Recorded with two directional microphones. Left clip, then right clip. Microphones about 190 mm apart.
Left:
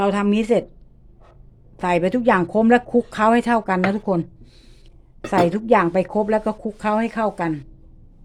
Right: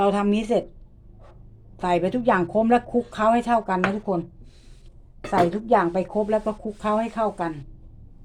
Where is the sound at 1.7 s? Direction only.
30° left (ahead or behind).